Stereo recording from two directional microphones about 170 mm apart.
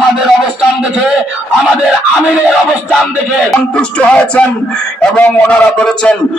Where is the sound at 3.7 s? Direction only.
5° left (ahead or behind).